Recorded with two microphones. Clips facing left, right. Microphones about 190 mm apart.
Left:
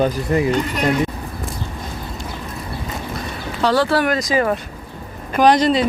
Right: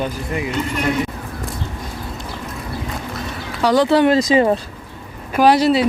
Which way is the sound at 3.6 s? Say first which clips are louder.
Right 3 dB; 15° right (ahead or behind).